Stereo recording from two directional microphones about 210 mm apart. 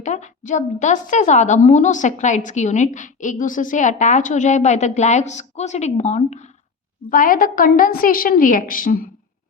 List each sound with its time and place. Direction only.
0.0 s a woman's voice: 35° left (ahead or behind)